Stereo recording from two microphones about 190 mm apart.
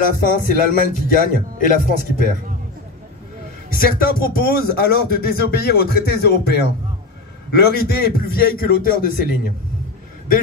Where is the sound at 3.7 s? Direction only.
50° left (ahead or behind).